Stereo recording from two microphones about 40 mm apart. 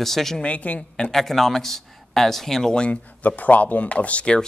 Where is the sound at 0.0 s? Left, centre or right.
Centre.